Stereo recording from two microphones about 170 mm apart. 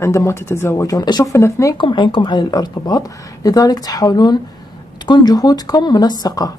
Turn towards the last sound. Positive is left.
turn(degrees=20)  # may be behind; listen again after turning